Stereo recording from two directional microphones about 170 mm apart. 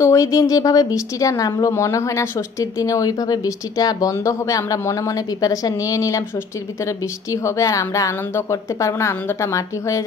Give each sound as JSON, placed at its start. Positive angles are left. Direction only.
{"t": 0.0, "sound": "speech", "side_deg": 20}
{"t": 7.4, "sound": "speech", "side_deg": 20}